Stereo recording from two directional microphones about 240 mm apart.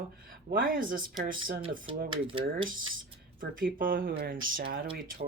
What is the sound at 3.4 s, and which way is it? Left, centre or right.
Speech, right.